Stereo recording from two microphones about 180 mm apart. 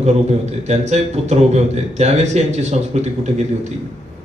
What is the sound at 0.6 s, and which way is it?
A man's voice, 40° right (ahead or behind).